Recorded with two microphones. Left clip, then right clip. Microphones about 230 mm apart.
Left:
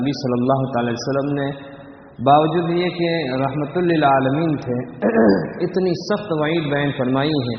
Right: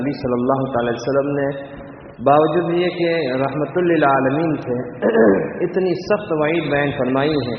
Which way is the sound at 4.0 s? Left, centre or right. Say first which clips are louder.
Left 2 dB; left.